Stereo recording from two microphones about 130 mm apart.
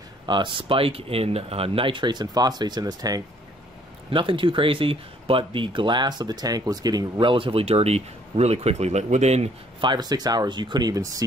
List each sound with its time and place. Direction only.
0.3 s speech: 40° right (ahead or behind)
4.1 s speech: 40° right (ahead or behind); by 9.5 s 55° right (ahead or behind)
9.8 s speech: 35° right (ahead or behind)